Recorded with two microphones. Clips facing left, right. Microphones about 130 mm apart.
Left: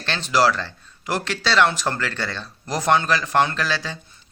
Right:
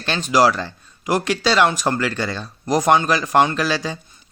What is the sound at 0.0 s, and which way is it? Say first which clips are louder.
Speech: right 3 dB; 15° right (ahead or behind).